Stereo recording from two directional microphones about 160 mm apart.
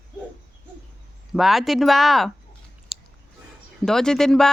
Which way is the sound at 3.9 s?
5° left (ahead or behind).